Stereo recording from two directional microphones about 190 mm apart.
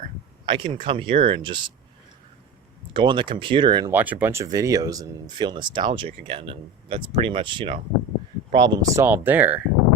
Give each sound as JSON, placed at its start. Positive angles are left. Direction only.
{"t": 0.4, "sound": "speech", "side_deg": -25}
{"t": 2.9, "sound": "speech", "side_deg": -25}
{"t": 3.9, "sound": "speech", "side_deg": -10}